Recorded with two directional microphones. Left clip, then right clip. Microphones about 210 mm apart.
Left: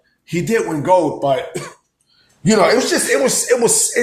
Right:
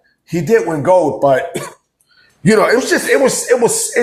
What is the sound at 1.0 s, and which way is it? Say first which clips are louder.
Speech: right 4 dB; 20° right (ahead or behind).